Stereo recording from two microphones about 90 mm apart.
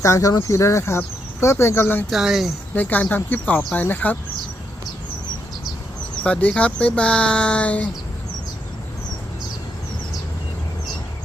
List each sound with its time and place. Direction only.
0.0 s speech: 35° left (ahead or behind)
2.0 s speech: 5° right (ahead or behind)
2.7 s speech: 20° left (ahead or behind)
6.2 s speech: 15° left (ahead or behind)